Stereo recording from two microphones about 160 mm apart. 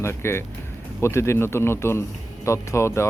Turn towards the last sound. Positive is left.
turn(degrees=15)  # may be behind; listen again after turning